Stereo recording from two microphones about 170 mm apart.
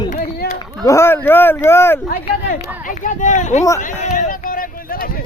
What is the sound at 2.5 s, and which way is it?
A man's voice, 50° left (ahead or behind).